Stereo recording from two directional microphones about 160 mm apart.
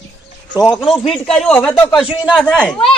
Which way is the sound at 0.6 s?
Centre (ahead or behind).